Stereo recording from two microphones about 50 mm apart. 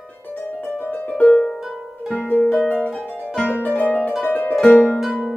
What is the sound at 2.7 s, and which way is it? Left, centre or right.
Harp, left.